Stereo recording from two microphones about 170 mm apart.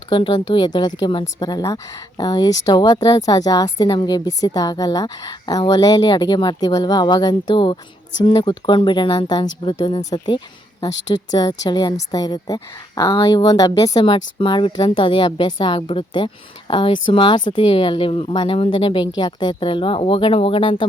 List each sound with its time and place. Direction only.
0.1 s a woman's voice: 30° left (ahead or behind)